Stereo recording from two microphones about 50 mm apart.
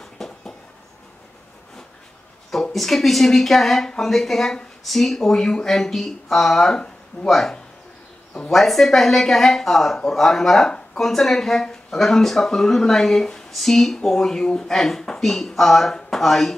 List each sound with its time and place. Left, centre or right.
0.2 s a sound: centre
2.5 s speech: centre
7.2 s speech: centre